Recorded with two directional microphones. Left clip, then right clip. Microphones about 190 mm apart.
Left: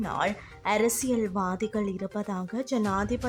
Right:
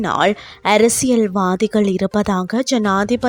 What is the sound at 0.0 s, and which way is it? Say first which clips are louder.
Speech: right 13 dB; 45° right (ahead or behind).